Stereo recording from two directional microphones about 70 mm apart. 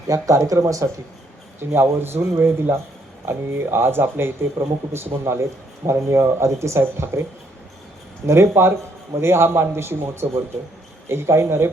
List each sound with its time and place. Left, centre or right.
0.1 s speech: right
1.5 s speech: right
8.3 s speech: right